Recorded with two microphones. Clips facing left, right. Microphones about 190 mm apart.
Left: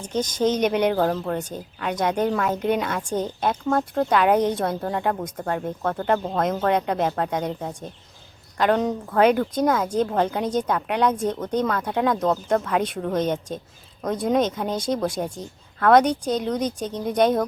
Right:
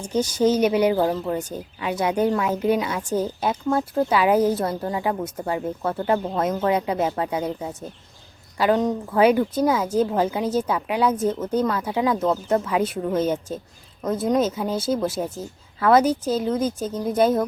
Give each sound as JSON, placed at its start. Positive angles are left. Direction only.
{"t": 0.0, "sound": "speech", "side_deg": -10}